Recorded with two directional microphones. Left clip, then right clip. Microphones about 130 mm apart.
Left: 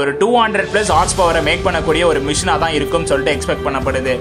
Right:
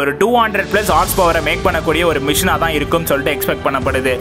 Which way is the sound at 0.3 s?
30° right (ahead or behind).